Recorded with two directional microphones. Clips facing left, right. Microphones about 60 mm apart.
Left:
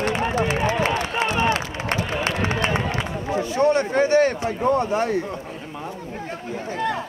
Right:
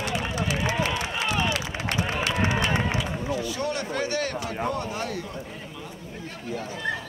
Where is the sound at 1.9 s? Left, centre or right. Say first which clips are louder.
Left 1 dB; right.